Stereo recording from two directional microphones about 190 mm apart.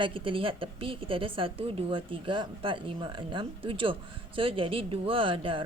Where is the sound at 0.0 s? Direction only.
25° right (ahead or behind).